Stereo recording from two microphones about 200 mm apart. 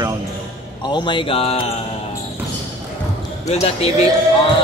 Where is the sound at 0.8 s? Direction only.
20° left (ahead or behind).